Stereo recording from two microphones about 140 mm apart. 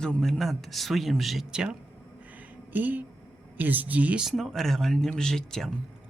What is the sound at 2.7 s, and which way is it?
Speech, 10° right (ahead or behind).